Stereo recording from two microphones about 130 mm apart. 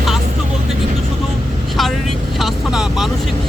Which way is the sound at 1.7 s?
Centre (ahead or behind).